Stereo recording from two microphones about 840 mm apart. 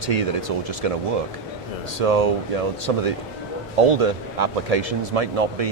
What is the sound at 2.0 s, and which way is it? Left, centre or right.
Speech, right.